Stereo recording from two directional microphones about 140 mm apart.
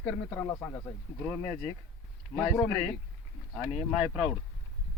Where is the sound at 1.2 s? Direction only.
10° left (ahead or behind).